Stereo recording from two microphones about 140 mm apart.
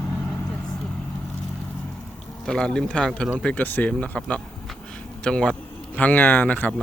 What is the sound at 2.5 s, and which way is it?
A man's voice, 5° left (ahead or behind).